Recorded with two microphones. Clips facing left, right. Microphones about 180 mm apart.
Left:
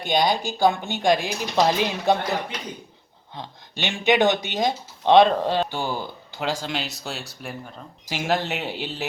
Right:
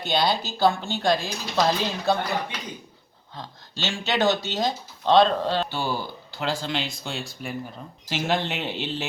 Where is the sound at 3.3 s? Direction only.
20° left (ahead or behind).